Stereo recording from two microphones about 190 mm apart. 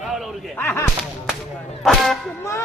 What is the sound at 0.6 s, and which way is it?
Speech, 15° left (ahead or behind).